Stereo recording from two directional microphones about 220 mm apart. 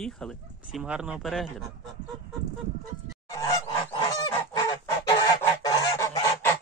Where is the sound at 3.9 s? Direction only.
15° left (ahead or behind).